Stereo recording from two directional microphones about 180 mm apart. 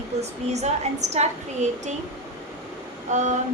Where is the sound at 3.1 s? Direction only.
40° right (ahead or behind).